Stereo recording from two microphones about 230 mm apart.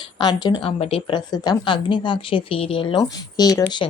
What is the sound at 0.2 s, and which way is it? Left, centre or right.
A woman's voice, centre.